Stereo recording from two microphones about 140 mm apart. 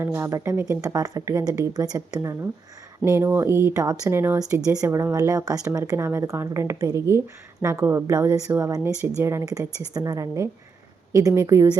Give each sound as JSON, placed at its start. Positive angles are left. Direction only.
{"t": 0.0, "sound": "speech", "side_deg": -20}